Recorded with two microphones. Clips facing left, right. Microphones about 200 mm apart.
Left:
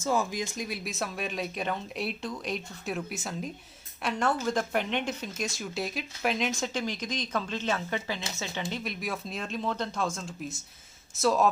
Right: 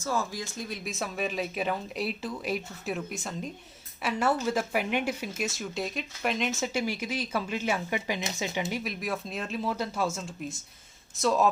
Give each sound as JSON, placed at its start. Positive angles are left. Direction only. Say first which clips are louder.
{"t": 0.0, "sound": "speech", "louder": "left 3 dB", "side_deg": 20}
{"t": 0.9, "sound": "speech", "louder": "right 2 dB", "side_deg": 0}